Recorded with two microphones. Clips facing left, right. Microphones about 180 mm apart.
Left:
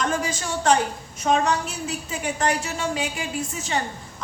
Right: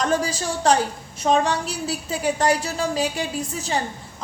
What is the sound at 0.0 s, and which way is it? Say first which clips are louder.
Speech: right 3 dB; 35° right (ahead or behind).